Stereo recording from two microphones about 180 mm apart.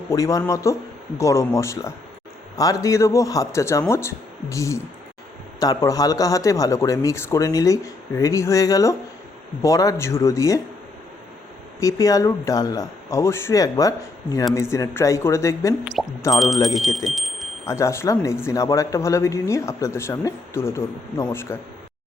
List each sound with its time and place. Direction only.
0.1 s speech: 20° left (ahead or behind)
11.8 s speech: 20° left (ahead or behind)
16.0 s speech: centre (ahead or behind)
17.7 s speech: 15° left (ahead or behind)